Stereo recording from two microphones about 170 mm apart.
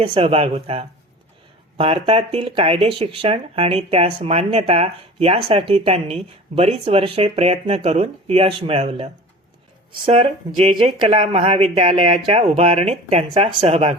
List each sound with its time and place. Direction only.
0.0 s speech: 35° right (ahead or behind)
10.1 s speech: 35° right (ahead or behind)